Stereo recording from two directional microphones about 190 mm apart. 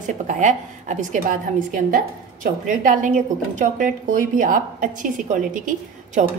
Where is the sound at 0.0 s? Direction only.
40° right (ahead or behind).